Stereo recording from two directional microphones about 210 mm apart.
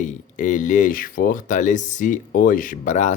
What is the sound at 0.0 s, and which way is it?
Speech, 35° left (ahead or behind).